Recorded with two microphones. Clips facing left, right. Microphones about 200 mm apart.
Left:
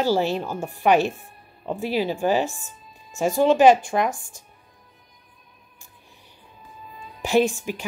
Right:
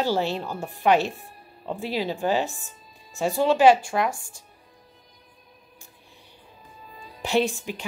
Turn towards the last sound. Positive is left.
turn(degrees=15)  # may be behind; listen again after turning